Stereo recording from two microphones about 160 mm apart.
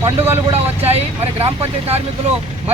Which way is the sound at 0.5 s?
40° right (ahead or behind).